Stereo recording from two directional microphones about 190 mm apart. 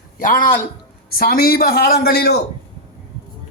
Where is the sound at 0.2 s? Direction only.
45° left (ahead or behind).